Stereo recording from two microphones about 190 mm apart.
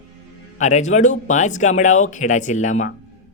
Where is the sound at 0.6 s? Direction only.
40° left (ahead or behind).